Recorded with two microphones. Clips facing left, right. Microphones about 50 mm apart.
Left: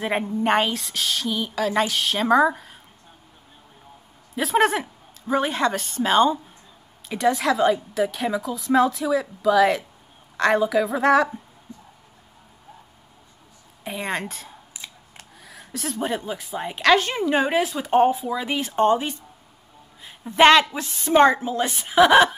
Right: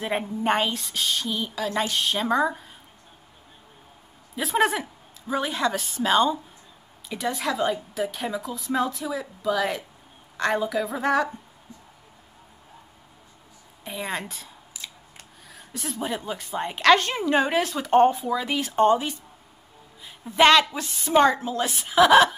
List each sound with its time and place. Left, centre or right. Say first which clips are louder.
0.0 s a woman's voice: left 3 dB; centre
4.4 s speech: left 3 dB; centre
5.5 s a woman's voice: left 3 dB; centre
5.8 s a woman's voice: left 3 dB; centre
6.0 s a woman's voice: left 3 dB; centre
13.8 s a woman's voice: left 3 dB; centre
20.3 s a woman's voice: left 3 dB; centre
21.2 s a woman's voice: left 3 dB; centre